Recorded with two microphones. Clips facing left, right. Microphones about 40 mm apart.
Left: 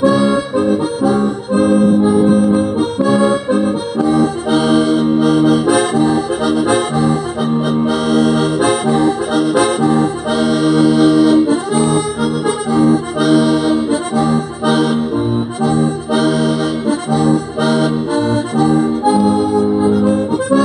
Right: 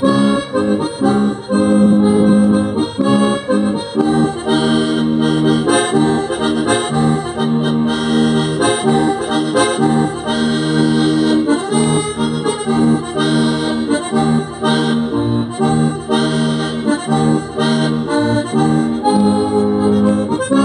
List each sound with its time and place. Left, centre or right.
0.0 s accordion: right
1.6 s accordion: right
2.0 s accordion: right